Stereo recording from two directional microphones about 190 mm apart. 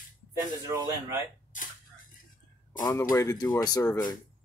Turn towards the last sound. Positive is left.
turn(degrees=20)  # may be behind; listen again after turning